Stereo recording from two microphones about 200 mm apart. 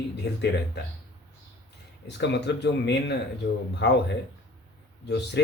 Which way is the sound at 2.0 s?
60° left (ahead or behind).